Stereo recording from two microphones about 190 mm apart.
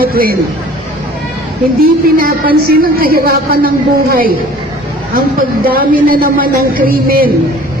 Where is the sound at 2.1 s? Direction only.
50° right (ahead or behind).